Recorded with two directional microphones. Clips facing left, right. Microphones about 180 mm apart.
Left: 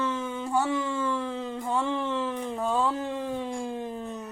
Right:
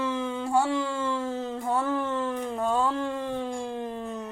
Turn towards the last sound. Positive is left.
turn(degrees=5)  # may be behind; listen again after turning